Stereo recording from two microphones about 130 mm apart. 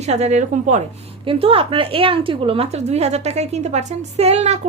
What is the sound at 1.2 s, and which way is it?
A woman's voice, 45° right (ahead or behind).